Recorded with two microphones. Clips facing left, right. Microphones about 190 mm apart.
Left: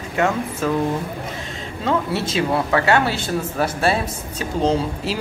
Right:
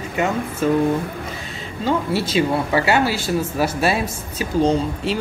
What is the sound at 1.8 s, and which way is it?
A woman's voice, centre (ahead or behind).